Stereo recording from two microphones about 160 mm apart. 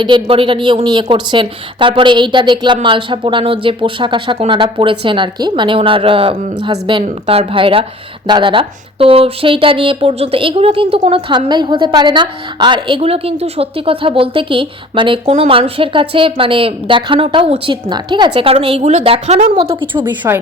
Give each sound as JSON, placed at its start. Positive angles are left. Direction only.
{"t": 0.0, "sound": "a woman's voice", "side_deg": -30}
{"t": 20.2, "sound": "a woman's voice", "side_deg": -20}